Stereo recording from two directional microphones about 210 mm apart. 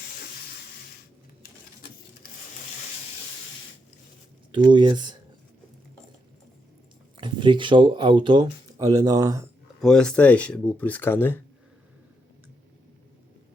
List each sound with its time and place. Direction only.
4.5 s speech: 20° right (ahead or behind)
7.2 s speech: 25° right (ahead or behind)
9.8 s speech: 5° left (ahead or behind)